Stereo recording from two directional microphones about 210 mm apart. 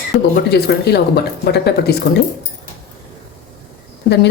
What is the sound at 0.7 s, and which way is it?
Speech, 50° left (ahead or behind).